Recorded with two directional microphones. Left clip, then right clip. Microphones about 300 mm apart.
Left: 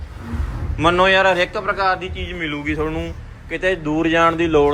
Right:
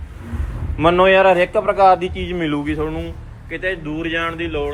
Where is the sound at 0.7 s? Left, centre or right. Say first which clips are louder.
Right 2 dB; centre.